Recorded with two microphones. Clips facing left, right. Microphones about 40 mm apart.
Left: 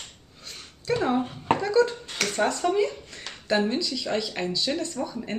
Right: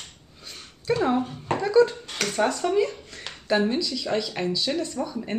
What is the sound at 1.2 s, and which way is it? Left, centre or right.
Speech, left.